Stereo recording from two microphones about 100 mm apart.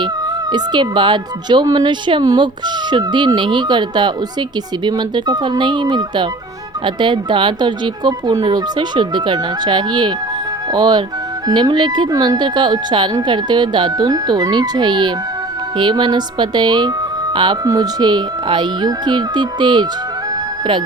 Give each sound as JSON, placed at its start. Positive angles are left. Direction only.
{"t": 0.5, "sound": "speech", "side_deg": -50}